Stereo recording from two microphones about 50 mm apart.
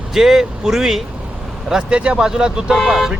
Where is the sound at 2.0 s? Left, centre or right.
Right; by 3.1 s centre.